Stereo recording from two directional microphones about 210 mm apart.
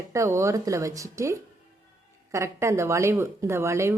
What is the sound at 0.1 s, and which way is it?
A woman's voice, 15° right (ahead or behind).